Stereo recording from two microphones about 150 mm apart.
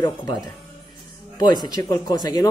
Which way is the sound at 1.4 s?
30° left (ahead or behind).